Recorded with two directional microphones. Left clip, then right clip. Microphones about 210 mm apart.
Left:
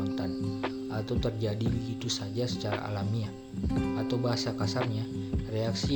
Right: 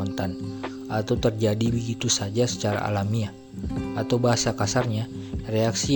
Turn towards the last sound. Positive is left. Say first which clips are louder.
# right 8 dB
turn(degrees=-40)  # may be behind; listen again after turning